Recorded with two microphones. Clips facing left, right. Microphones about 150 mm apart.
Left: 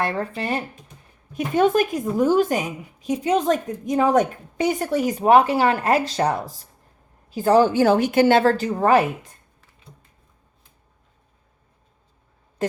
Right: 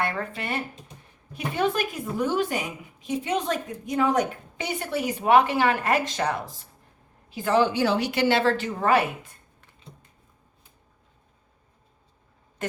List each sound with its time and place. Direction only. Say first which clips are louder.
0.0 s a woman's voice: left 4 dB; 35° left (ahead or behind)
1.5 s a woman's voice: left 8 dB; 45° left (ahead or behind)